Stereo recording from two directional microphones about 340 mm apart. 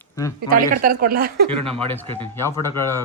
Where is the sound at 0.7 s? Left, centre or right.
Right.